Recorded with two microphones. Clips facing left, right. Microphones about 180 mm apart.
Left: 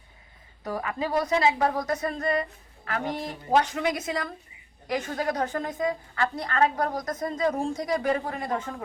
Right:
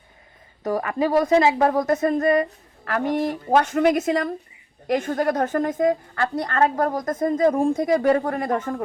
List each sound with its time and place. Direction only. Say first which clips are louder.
0.6 s speech: right 8 dB; 50° right (ahead or behind)